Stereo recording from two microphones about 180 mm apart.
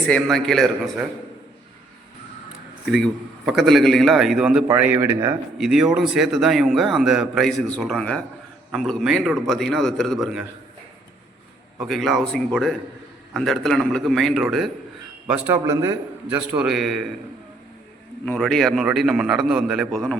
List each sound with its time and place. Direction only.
0.1 s a man's voice: centre (ahead or behind)
2.8 s a man's voice: centre (ahead or behind)
11.8 s a man's voice: centre (ahead or behind)
15.5 s a man's voice: 15° right (ahead or behind); by 17.1 s centre (ahead or behind)
18.3 s a man's voice: 5° left (ahead or behind)